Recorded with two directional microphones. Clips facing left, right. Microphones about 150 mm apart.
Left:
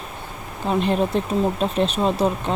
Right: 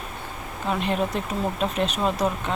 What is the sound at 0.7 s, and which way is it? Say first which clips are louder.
Speech: left 5 dB; 30° left (ahead or behind).